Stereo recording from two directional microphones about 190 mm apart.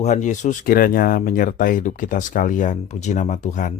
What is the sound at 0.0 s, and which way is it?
Speech, 40° left (ahead or behind).